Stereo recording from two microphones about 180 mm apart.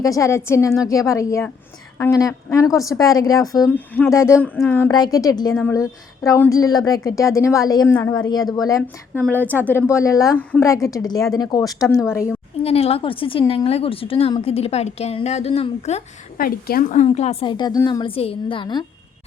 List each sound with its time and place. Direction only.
0.0 s a woman's voice: 20° left (ahead or behind)
4.9 s a woman's voice: 20° left (ahead or behind)
12.6 s a woman's voice: 35° left (ahead or behind)
16.4 s a woman's voice: 55° left (ahead or behind); by 18.0 s 20° left (ahead or behind)
18.0 s a woman's voice: 30° left (ahead or behind)